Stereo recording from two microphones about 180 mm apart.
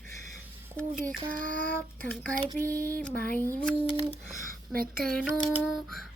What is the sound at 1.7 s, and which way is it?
Child singing, 5° left (ahead or behind).